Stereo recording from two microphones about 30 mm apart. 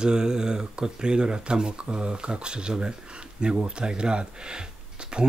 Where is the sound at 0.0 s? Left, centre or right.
Right.